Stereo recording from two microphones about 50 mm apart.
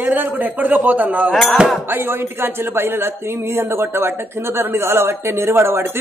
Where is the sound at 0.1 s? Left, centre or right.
Right.